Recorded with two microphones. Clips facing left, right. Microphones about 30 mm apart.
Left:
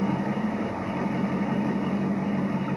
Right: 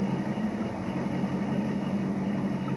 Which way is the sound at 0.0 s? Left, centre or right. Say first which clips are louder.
Left 3 dB; centre.